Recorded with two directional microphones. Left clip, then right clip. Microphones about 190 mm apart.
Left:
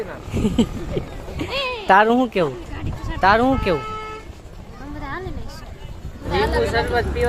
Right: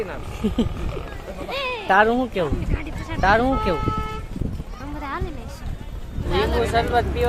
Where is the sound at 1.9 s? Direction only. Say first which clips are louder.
Left 3 dB; 20° left (ahead or behind).